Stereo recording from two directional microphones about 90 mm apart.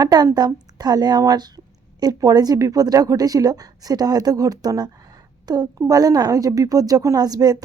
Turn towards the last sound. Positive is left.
turn(degrees=-45)  # may be behind; listen again after turning